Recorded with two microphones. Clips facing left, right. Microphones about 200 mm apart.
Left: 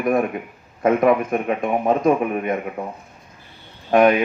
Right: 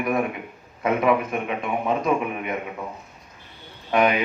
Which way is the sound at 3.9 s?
45° left (ahead or behind).